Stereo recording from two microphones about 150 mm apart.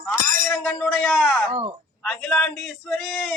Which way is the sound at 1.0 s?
Centre (ahead or behind).